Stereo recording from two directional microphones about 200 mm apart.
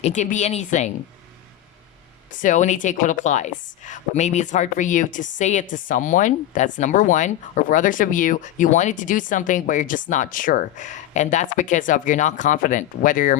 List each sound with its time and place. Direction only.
0.0 s a woman's voice: 35° left (ahead or behind)
2.3 s a woman's voice: 40° left (ahead or behind)